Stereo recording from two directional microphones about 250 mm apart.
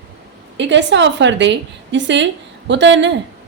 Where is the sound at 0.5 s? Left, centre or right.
Right.